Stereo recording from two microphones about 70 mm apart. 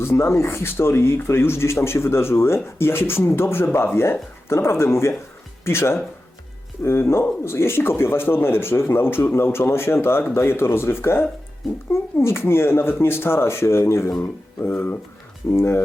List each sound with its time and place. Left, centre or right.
0.0 s speech: left